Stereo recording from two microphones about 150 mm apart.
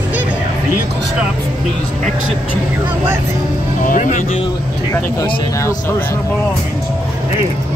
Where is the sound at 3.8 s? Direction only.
60° left (ahead or behind).